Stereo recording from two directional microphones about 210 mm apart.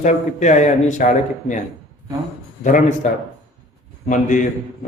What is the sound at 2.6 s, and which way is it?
Speech, 35° left (ahead or behind).